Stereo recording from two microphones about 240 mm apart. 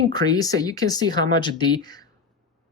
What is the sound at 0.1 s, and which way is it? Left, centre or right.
Speech, centre.